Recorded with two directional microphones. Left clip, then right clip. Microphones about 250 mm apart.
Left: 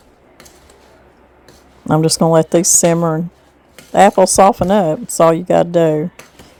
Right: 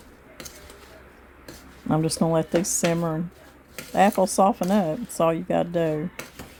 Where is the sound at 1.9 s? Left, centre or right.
Left.